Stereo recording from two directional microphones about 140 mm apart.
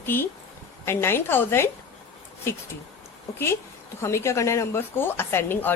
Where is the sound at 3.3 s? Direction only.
20° left (ahead or behind).